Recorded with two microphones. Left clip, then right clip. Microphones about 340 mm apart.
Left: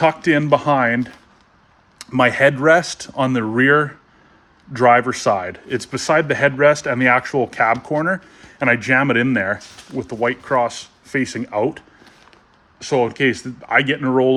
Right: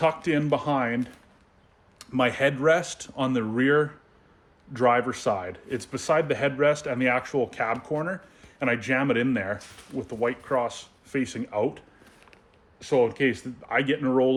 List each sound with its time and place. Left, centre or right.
0.0 s a man's voice: left
2.0 s a man's voice: left
12.8 s a man's voice: left